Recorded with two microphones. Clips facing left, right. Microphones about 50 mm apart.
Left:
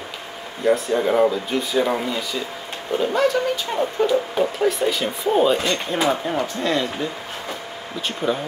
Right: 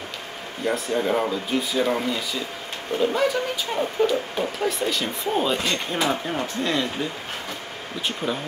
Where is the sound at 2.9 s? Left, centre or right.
Right.